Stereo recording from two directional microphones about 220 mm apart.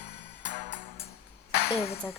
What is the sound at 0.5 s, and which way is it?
Music, 30° left (ahead or behind).